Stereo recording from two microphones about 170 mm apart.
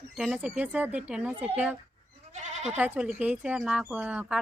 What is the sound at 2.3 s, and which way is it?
Goat, 45° right (ahead or behind).